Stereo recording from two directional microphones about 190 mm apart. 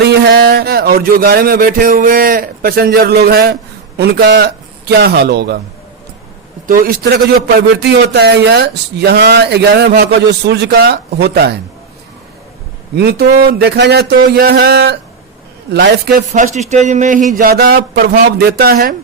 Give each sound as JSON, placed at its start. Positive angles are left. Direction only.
{"t": 0.0, "sound": "speech", "side_deg": -55}
{"t": 6.7, "sound": "a man's voice", "side_deg": -50}
{"t": 13.0, "sound": "a man's voice", "side_deg": -60}
{"t": 17.3, "sound": "speech", "side_deg": -50}